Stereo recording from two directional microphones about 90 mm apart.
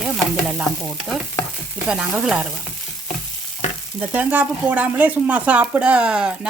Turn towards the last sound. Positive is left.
turn(degrees=-10)  # may be behind; listen again after turning